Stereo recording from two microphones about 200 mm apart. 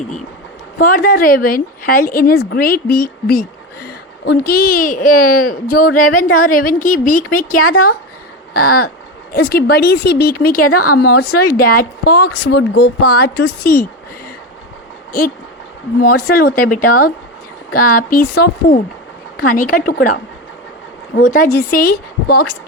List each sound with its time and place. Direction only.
0.8 s a woman's voice: 45° left (ahead or behind)
6.1 s a woman's voice: 90° left
6.3 s a woman's voice: 45° left (ahead or behind)
16.2 s a woman's voice: 50° left (ahead or behind)
21.2 s a woman's voice: 45° left (ahead or behind)